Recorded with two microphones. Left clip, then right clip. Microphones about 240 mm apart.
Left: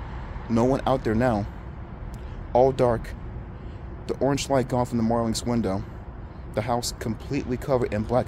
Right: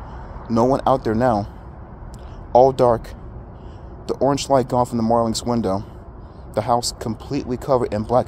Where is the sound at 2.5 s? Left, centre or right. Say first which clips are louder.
Right 6 dB; right.